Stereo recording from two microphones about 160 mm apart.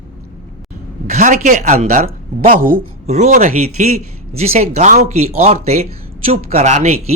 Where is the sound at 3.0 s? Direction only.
45° right (ahead or behind).